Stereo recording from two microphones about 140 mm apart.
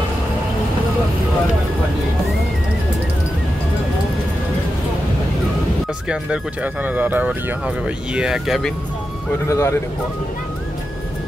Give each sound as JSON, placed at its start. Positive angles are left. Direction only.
{"t": 6.0, "sound": "speech", "side_deg": -10}
{"t": 9.5, "sound": "speech", "side_deg": 20}